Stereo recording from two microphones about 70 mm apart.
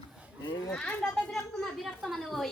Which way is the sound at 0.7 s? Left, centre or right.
Centre.